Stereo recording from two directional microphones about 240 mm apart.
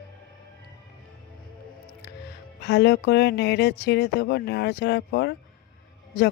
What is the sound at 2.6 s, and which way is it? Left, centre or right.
Speech, left.